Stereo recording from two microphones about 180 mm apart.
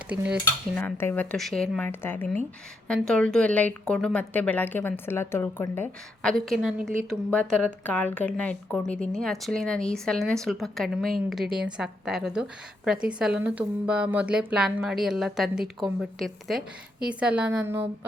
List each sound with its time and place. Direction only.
0.1 s cutlery: 65° right (ahead or behind)
0.8 s a woman's voice: 10° left (ahead or behind)
6.3 s a woman's voice: centre (ahead or behind)
7.9 s a woman's voice: 10° left (ahead or behind); by 17.8 s 10° right (ahead or behind)